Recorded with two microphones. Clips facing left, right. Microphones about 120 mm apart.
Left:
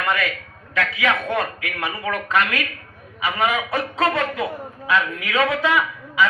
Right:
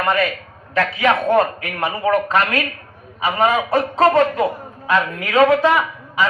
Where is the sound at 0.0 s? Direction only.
30° right (ahead or behind).